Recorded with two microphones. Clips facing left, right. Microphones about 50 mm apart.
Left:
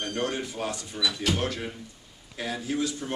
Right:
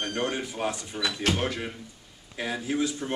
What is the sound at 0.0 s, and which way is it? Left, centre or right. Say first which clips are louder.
A man's voice: even; right.